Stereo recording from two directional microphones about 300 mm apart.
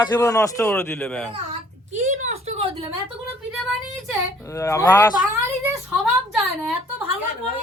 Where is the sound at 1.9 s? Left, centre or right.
Right.